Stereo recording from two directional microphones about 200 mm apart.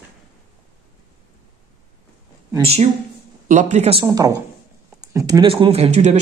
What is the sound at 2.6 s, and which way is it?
Speech, 30° right (ahead or behind).